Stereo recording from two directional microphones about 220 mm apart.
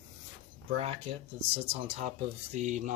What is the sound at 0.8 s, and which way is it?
Speech, 30° right (ahead or behind).